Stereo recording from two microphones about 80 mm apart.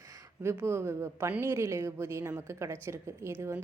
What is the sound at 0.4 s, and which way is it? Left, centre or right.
A woman's voice, right.